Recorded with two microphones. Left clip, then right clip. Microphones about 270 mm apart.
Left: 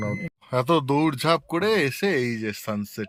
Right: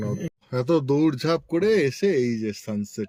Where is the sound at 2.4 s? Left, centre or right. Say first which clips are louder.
Left 1 dB; left.